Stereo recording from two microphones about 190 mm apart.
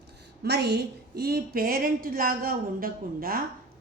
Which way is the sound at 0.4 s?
60° right (ahead or behind).